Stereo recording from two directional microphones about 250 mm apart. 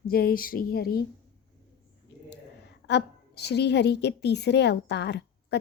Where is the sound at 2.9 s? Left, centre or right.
Left.